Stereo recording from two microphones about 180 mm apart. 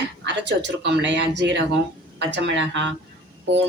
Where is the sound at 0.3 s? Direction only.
80° right.